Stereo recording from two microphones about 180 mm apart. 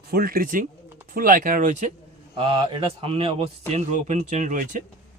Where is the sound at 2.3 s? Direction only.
30° right (ahead or behind).